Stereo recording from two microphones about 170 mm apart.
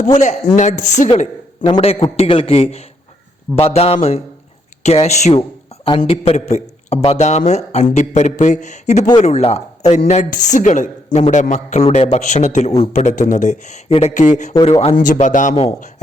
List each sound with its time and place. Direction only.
0.0 s speech: 45° left (ahead or behind)
1.6 s a man's voice: 30° left (ahead or behind)
14.9 s speech: 50° left (ahead or behind)